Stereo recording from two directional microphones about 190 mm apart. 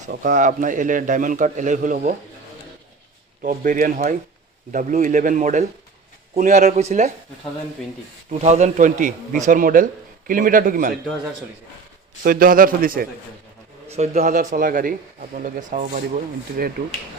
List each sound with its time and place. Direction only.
0.1 s a man's voice: 45° right (ahead or behind)
3.4 s a man's voice: 45° right (ahead or behind)
8.4 s a man's voice: 40° right (ahead or behind)
12.2 s a man's voice: 50° right (ahead or behind)
13.9 s speech: 35° right (ahead or behind)
14.3 s a man's voice: 50° right (ahead or behind)